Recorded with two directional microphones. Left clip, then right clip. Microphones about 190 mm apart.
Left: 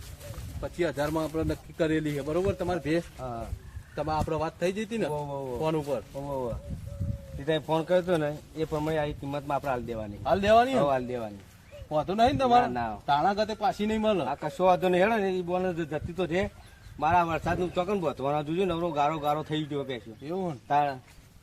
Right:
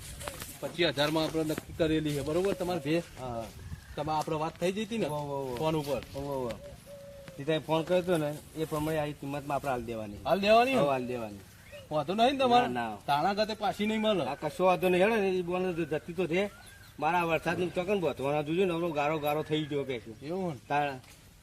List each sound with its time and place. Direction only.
0.6 s speech: centre (ahead or behind)
3.2 s a man's voice: 15° left (ahead or behind)
3.9 s speech: centre (ahead or behind)
5.1 s a man's voice: 15° left (ahead or behind)
5.5 s speech: centre (ahead or behind)
6.1 s a man's voice: 15° left (ahead or behind)
10.2 s speech: centre (ahead or behind)
10.8 s a man's voice: 15° left (ahead or behind)
11.9 s speech: centre (ahead or behind)
14.3 s a man's voice: 15° left (ahead or behind)
20.2 s speech: centre (ahead or behind)
20.7 s a man's voice: 15° left (ahead or behind)